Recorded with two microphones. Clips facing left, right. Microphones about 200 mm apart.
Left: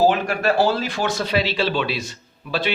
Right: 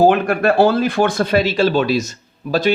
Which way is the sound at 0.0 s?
55° right (ahead or behind).